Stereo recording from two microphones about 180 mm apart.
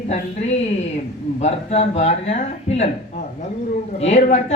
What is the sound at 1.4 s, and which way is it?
Speech, 35° left (ahead or behind).